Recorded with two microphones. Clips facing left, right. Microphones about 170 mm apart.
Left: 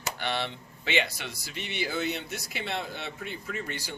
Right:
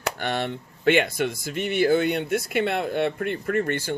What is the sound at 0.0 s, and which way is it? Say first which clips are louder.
Speech: right 5 dB; 45° right (ahead or behind).